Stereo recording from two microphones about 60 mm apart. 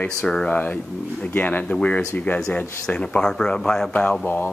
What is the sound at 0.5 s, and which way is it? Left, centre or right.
Speech, left.